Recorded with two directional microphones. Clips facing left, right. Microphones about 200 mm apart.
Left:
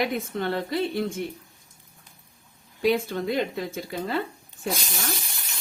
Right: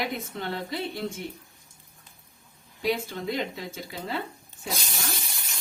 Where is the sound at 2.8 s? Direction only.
55° left (ahead or behind).